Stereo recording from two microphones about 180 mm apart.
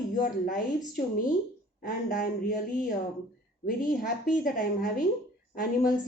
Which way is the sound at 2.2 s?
45° left (ahead or behind).